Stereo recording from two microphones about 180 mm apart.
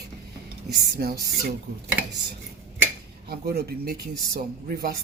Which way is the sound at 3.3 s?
60° right (ahead or behind).